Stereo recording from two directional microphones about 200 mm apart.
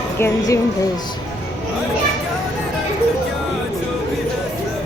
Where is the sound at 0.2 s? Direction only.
15° left (ahead or behind).